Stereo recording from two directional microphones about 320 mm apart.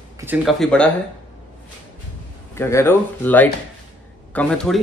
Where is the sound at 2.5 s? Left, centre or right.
Centre.